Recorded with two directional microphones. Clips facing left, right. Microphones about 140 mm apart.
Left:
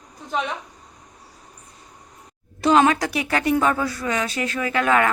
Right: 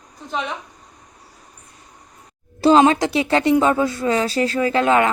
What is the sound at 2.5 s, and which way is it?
A woman's voice, 30° right (ahead or behind).